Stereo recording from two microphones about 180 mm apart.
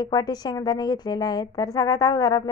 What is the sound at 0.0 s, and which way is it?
A woman's voice, 20° left (ahead or behind).